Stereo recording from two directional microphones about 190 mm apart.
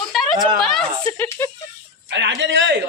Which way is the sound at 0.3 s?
25° right (ahead or behind).